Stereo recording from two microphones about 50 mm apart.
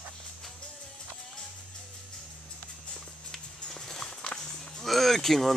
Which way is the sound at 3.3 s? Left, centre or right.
Centre.